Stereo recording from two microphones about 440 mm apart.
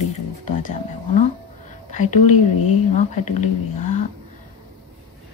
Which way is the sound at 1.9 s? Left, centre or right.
Centre.